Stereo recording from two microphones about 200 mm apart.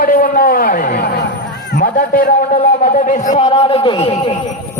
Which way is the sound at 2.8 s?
40° left (ahead or behind).